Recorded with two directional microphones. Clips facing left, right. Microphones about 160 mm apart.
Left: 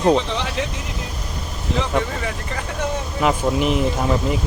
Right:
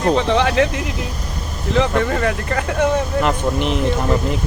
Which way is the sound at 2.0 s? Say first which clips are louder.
Right 5 dB; 60° right (ahead or behind).